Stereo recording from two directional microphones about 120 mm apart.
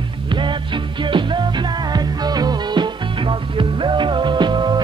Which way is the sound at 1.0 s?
40° right (ahead or behind).